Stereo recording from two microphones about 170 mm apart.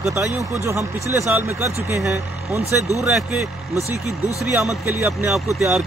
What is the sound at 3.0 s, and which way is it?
Speech, 5° right (ahead or behind).